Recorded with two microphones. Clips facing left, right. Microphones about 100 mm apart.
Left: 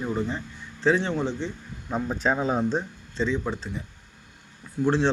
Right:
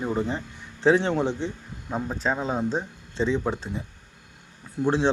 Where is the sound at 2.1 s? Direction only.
5° left (ahead or behind).